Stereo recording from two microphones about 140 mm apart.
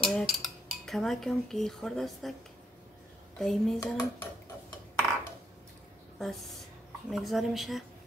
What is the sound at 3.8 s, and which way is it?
Dishes, 15° left (ahead or behind).